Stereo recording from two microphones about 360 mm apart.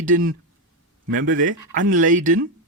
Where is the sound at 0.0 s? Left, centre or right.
Right.